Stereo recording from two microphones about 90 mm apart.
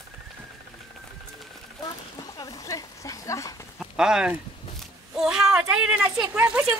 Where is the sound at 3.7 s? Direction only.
10° right (ahead or behind).